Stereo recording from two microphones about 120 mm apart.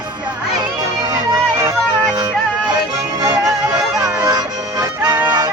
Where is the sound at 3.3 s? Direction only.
30° right (ahead or behind).